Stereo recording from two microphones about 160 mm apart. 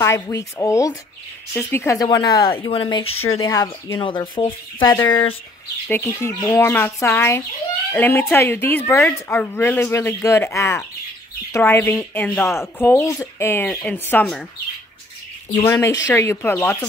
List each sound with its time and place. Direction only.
0.0 s speech: 20° left (ahead or behind); by 3.1 s 35° left (ahead or behind)
3.3 s speech: 20° left (ahead or behind)
4.9 s speech: 15° left (ahead or behind)
15.6 s speech: 20° left (ahead or behind)